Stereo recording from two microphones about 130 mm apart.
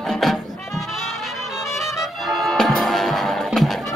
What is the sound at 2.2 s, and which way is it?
Music, centre (ahead or behind).